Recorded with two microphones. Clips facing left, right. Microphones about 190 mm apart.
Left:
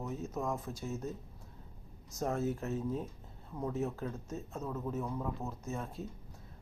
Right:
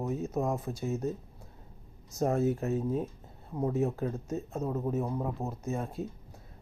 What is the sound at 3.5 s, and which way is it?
Speech, 30° right (ahead or behind).